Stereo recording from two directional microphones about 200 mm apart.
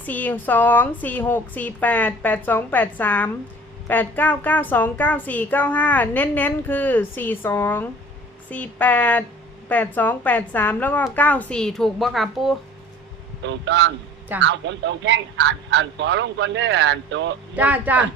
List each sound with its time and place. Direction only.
0.0 s a woman's voice: 10° left (ahead or behind)
13.4 s speech: 65° right (ahead or behind)
17.5 s speech: 10° right (ahead or behind)